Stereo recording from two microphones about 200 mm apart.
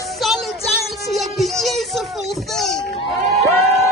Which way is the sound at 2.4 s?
Centre (ahead or behind).